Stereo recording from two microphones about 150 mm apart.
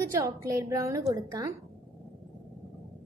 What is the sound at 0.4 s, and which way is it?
A woman's voice, 20° right (ahead or behind).